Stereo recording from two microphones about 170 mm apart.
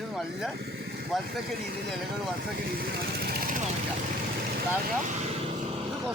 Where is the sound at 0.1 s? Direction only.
Centre (ahead or behind).